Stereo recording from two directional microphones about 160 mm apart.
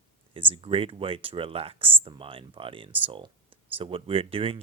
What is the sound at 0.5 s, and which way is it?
Speech, 35° right (ahead or behind).